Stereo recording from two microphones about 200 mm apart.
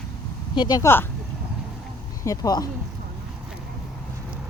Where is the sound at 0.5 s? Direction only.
20° left (ahead or behind).